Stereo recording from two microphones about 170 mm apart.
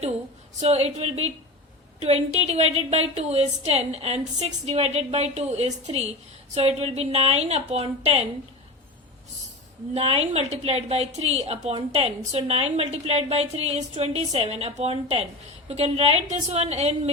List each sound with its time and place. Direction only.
0.6 s a woman's voice: 40° right (ahead or behind)
9.9 s a woman's voice: 35° right (ahead or behind)